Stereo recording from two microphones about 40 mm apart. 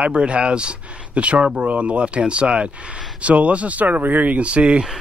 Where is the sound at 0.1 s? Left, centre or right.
Right.